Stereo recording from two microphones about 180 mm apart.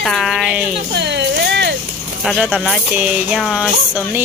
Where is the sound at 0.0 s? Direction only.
Centre (ahead or behind).